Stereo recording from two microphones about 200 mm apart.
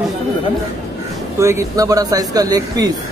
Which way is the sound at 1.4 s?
15° right (ahead or behind).